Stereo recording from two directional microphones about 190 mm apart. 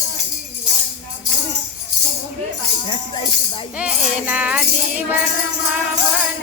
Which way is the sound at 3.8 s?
5° right (ahead or behind).